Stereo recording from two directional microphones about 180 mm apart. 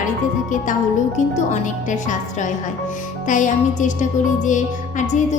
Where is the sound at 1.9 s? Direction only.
45° left (ahead or behind).